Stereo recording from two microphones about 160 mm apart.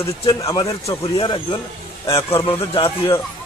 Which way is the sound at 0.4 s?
20° left (ahead or behind).